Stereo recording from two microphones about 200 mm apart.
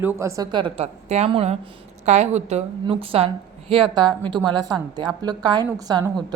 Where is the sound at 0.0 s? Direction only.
10° right (ahead or behind); by 3.2 s 30° right (ahead or behind).